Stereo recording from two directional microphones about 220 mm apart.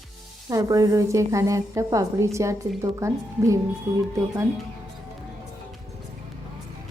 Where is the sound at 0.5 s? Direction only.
15° right (ahead or behind).